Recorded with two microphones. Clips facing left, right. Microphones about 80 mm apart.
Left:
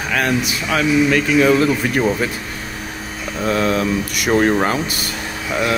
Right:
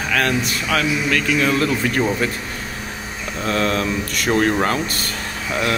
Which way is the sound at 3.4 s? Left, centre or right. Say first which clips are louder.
Left 3 dB; centre.